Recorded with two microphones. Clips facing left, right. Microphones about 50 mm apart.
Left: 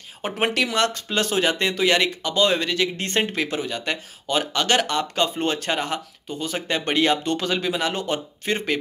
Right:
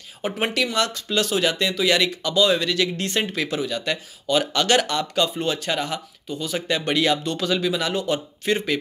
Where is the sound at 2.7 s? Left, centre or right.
Left.